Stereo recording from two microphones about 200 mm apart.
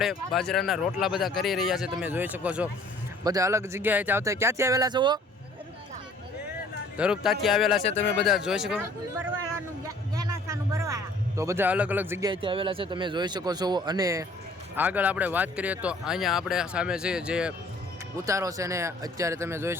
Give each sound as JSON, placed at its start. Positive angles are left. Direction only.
{"t": 0.0, "sound": "speech", "side_deg": 0}
{"t": 6.9, "sound": "speech", "side_deg": -5}
{"t": 10.2, "sound": "a sound", "side_deg": -15}
{"t": 12.3, "sound": "speech", "side_deg": -25}
{"t": 18.3, "sound": "speech", "side_deg": -15}